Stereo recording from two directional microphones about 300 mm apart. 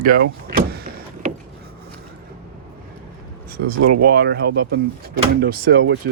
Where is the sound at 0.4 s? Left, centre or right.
Right.